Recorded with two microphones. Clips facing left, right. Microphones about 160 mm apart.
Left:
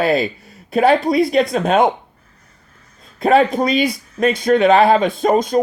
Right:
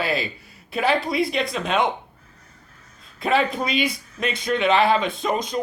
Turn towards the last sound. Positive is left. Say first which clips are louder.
# left 9 dB
turn(degrees=45)  # may be behind; listen again after turning